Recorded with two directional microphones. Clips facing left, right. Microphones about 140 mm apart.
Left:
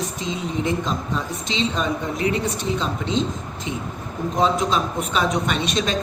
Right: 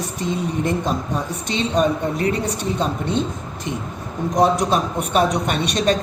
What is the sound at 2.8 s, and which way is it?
Speech, 55° right (ahead or behind).